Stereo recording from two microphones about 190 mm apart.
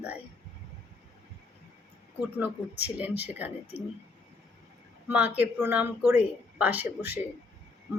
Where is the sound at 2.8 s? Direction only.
10° right (ahead or behind).